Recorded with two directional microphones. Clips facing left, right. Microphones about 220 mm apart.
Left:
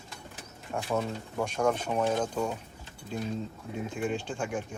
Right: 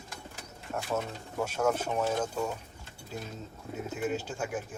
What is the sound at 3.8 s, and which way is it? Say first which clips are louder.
Speech: even; 5° right (ahead or behind).